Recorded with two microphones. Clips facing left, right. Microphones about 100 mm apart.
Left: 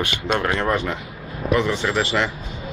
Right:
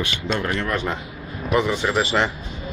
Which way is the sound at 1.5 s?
10° right (ahead or behind).